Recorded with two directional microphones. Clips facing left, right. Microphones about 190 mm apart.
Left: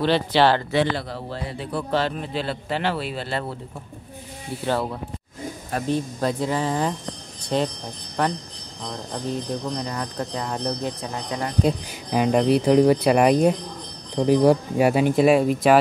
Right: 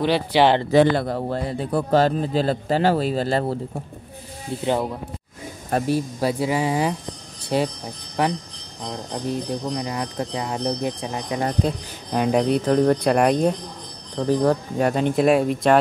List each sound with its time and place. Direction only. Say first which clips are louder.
0.0 s speech: right 1 dB; 10° right (ahead or behind)
0.7 s a man's voice: right 6 dB; 45° right (ahead or behind)
4.6 s speech: right 2 dB; 15° right (ahead or behind)
9.8 s speech: right 2 dB; 10° right (ahead or behind)
12.1 s speech: left 1 dB; centre (ahead or behind)